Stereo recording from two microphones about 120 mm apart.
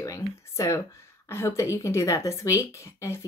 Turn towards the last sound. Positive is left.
turn(degrees=25)  # may be behind; listen again after turning